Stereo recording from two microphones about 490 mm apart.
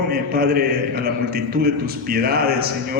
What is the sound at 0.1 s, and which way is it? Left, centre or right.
A man's voice, centre.